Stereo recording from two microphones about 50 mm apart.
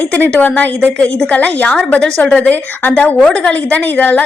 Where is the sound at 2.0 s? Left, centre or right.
Centre.